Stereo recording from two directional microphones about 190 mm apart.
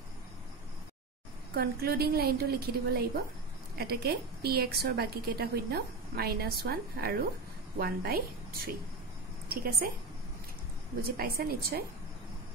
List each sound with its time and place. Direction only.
1.5 s a woman's voice: 55° right (ahead or behind)
9.5 s a woman's voice: 55° right (ahead or behind)
11.1 s a woman's voice: 55° right (ahead or behind)